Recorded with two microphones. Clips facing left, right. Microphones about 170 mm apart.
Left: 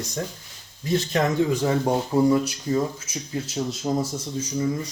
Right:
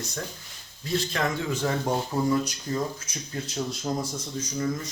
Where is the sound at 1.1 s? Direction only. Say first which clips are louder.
Left 7 dB; 15° left (ahead or behind).